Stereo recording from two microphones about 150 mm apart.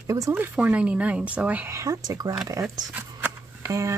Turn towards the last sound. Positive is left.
turn(degrees=-20)  # may be behind; listen again after turning